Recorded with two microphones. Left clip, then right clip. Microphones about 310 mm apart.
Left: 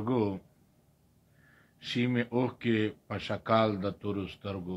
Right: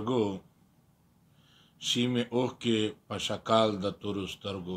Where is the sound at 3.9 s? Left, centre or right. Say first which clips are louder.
Right 1 dB; right.